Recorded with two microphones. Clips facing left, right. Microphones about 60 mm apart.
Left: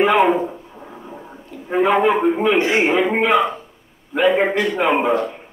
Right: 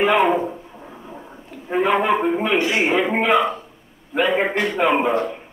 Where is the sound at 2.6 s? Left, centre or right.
Left.